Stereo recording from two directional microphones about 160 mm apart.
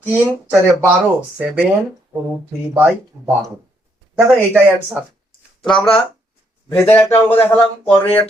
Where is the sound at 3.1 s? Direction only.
25° right (ahead or behind).